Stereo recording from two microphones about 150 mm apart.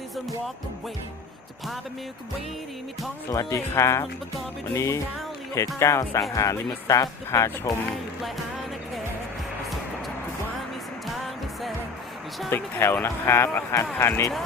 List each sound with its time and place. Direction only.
3.2 s speech: 20° left (ahead or behind)
12.5 s speech: 15° left (ahead or behind)